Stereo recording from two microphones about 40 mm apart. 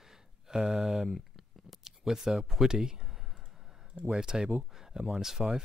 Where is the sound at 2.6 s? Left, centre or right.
Centre.